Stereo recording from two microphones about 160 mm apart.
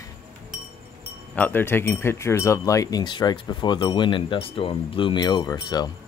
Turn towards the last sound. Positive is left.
turn(degrees=25)  # may be behind; listen again after turning